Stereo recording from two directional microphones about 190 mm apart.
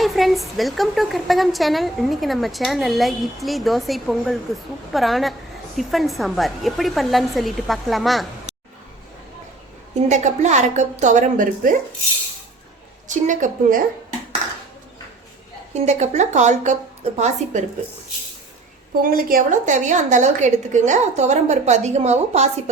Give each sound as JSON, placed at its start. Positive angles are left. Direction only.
{"t": 0.0, "sound": "a woman's voice", "side_deg": 0}
{"t": 10.1, "sound": "a woman's voice", "side_deg": -40}
{"t": 13.1, "sound": "a woman's voice", "side_deg": -40}
{"t": 15.9, "sound": "a woman's voice", "side_deg": -40}
{"t": 19.1, "sound": "a woman's voice", "side_deg": -50}